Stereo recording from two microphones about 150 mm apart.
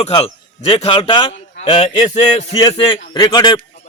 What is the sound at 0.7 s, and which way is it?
A man's voice, 35° left (ahead or behind).